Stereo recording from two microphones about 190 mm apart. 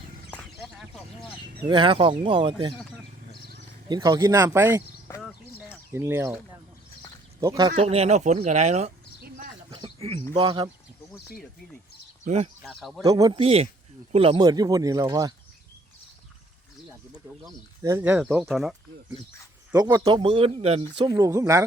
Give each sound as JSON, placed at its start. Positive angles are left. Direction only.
{"t": 0.3, "sound": "a sound", "side_deg": 5}
{"t": 1.6, "sound": "speech", "side_deg": -25}
{"t": 3.8, "sound": "speech", "side_deg": -20}
{"t": 5.9, "sound": "speech", "side_deg": -15}
{"t": 7.4, "sound": "speech", "side_deg": -20}
{"t": 7.7, "sound": "speech", "side_deg": -35}
{"t": 9.6, "sound": "a sound", "side_deg": -25}
{"t": 10.3, "sound": "speech", "side_deg": -25}
{"t": 12.2, "sound": "speech", "side_deg": -35}
{"t": 13.0, "sound": "speech", "side_deg": -20}
{"t": 17.4, "sound": "speech", "side_deg": -15}
{"t": 19.7, "sound": "speech", "side_deg": -20}